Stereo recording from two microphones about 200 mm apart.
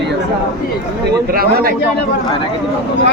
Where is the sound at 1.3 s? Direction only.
50° right (ahead or behind).